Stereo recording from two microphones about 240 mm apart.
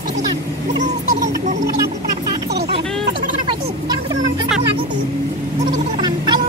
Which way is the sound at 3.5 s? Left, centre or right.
Centre.